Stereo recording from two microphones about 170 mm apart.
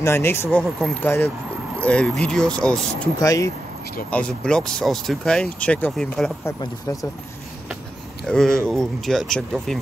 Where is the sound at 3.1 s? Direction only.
20° left (ahead or behind).